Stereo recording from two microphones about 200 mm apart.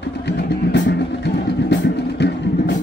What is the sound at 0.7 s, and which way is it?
Vehicle, 60° left (ahead or behind).